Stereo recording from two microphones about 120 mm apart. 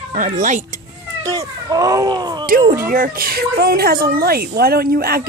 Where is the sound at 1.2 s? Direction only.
30° right (ahead or behind).